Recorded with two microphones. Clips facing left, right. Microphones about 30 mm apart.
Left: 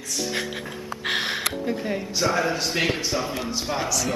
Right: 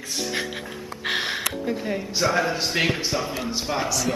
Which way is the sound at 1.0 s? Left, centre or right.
Centre.